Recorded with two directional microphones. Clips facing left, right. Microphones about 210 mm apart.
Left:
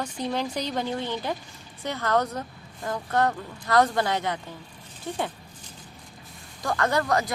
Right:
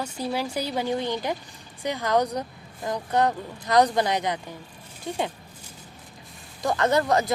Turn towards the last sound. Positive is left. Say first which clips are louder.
# right 3 dB
turn(degrees=-25)  # may be behind; listen again after turning